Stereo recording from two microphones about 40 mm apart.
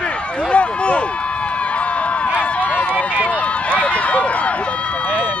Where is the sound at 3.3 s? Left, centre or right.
Left.